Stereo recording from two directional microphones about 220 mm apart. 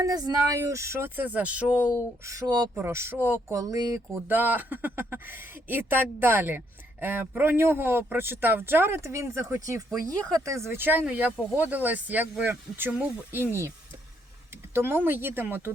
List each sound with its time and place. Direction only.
0.0 s speech: 15° right (ahead or behind)